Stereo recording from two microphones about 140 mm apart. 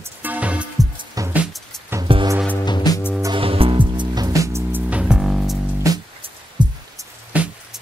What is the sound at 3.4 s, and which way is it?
Music, 40° right (ahead or behind).